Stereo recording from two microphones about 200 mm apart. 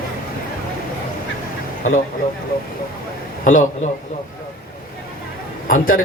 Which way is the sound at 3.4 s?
40° left (ahead or behind).